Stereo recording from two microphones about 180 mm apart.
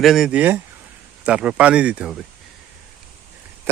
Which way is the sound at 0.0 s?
Centre (ahead or behind).